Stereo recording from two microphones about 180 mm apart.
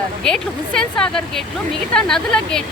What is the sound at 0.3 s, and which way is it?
Speech, 5° left (ahead or behind).